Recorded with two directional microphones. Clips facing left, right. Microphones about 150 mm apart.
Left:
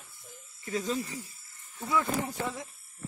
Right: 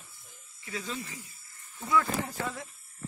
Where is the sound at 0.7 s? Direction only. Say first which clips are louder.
Left 6 dB; 45° left (ahead or behind).